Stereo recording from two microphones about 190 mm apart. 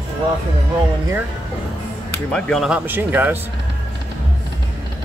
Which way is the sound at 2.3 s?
5° left (ahead or behind).